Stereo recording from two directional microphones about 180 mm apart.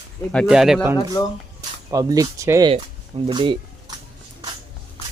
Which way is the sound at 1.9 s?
20° right (ahead or behind).